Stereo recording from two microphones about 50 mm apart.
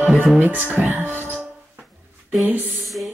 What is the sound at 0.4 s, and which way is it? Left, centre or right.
Music, right.